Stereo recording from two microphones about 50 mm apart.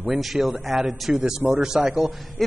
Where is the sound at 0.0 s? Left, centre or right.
Centre.